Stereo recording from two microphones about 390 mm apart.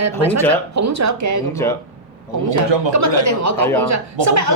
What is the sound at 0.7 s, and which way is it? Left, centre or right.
A woman's voice, right.